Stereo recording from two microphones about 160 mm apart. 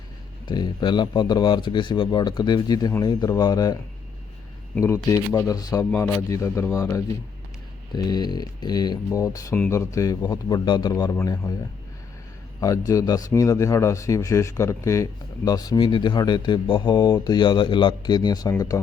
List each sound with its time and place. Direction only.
0.4 s a man's voice: 30° left (ahead or behind)
7.9 s a man's voice: 25° left (ahead or behind)
12.5 s a man's voice: 20° left (ahead or behind)